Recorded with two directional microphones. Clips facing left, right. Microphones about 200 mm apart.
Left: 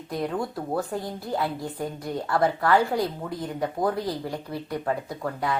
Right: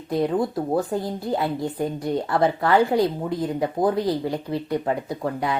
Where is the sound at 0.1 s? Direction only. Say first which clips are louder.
Right 6 dB; 25° right (ahead or behind).